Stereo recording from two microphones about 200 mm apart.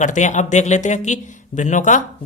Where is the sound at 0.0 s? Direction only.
40° left (ahead or behind).